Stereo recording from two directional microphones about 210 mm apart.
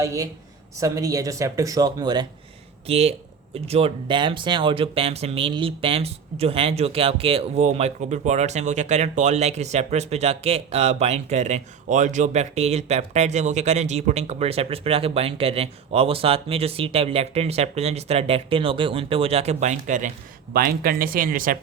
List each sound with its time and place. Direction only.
0.0 s speech: 15° right (ahead or behind); by 21.6 s 40° right (ahead or behind)